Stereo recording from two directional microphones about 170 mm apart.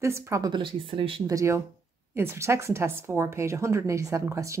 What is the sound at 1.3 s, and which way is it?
A woman's voice, 15° right (ahead or behind).